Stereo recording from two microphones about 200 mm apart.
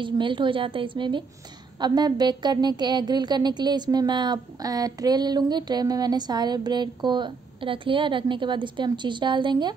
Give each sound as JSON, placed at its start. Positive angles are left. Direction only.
{"t": 0.0, "sound": "a woman's voice", "side_deg": -25}